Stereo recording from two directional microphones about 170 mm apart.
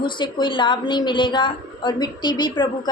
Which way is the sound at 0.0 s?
25° left (ahead or behind).